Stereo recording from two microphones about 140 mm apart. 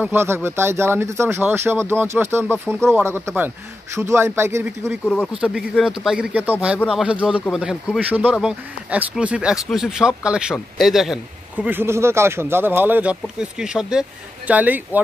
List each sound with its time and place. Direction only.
0.0 s speech: 15° right (ahead or behind)
5.0 s speech: 10° left (ahead or behind)
5.3 s speech: 5° right (ahead or behind)
11.6 s speech: 15° right (ahead or behind)